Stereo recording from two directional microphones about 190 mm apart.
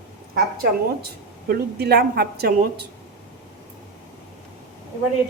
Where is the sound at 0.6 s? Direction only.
55° right (ahead or behind).